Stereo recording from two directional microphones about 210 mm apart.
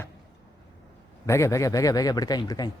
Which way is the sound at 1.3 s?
15° left (ahead or behind).